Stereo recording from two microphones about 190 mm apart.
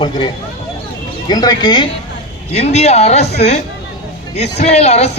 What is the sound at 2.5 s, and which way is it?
A man's voice, 35° left (ahead or behind).